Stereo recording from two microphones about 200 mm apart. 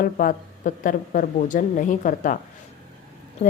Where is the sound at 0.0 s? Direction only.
45° left (ahead or behind).